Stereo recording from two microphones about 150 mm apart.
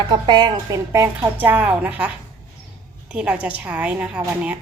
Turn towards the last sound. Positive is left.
turn(degrees=-10)  # may be behind; listen again after turning